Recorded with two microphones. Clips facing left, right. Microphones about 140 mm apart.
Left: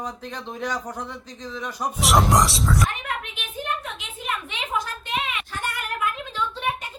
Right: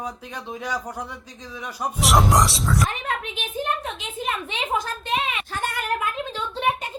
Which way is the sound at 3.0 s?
30° right (ahead or behind).